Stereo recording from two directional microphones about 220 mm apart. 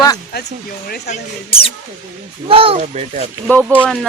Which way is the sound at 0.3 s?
50° left (ahead or behind).